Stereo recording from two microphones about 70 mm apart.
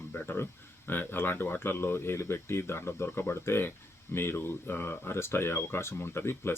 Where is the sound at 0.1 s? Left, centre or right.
Left.